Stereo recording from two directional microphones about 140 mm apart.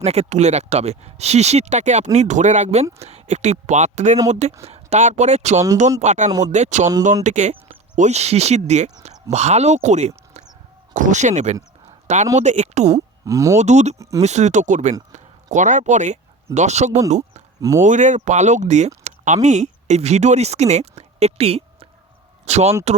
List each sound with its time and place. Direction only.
0.0 s speech: 50° right (ahead or behind)
13.2 s speech: 20° right (ahead or behind)
13.6 s speech: 55° right (ahead or behind)
15.1 s a sound: 60° right (ahead or behind)
16.6 s speech: 55° right (ahead or behind)